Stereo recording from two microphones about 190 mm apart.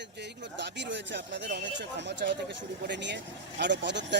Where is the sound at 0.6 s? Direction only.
65° right (ahead or behind).